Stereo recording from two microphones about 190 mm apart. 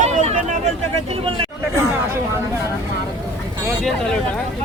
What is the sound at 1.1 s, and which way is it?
Speech, 30° right (ahead or behind).